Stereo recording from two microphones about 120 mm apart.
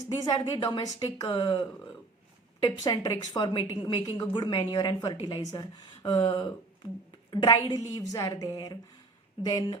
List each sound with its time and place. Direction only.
0.0 s speech: 35° left (ahead or behind)